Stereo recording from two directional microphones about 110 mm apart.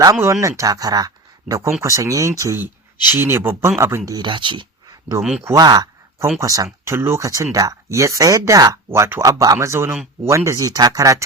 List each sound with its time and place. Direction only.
0.0 s speech: 30° right (ahead or behind)
4.2 s speech: 45° right (ahead or behind)
5.4 s speech: 25° right (ahead or behind)
5.6 s speech: 40° right (ahead or behind)
8.9 s speech: 25° right (ahead or behind)